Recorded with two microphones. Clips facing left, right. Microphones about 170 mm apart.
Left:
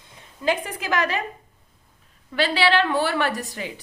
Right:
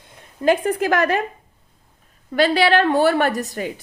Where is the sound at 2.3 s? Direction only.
45° right (ahead or behind).